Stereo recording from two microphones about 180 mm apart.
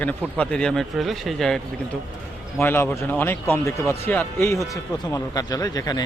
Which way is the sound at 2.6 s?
15° left (ahead or behind).